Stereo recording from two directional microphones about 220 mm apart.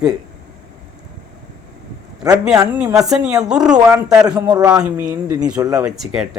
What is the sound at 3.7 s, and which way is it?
Speech, 15° right (ahead or behind).